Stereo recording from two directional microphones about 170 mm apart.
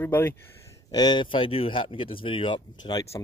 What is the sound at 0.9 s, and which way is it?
Speech, 25° left (ahead or behind).